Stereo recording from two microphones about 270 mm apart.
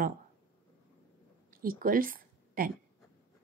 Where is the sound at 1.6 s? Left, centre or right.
Right.